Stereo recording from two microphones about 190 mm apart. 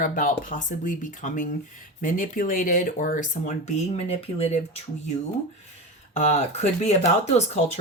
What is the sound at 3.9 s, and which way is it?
Speech, 30° left (ahead or behind).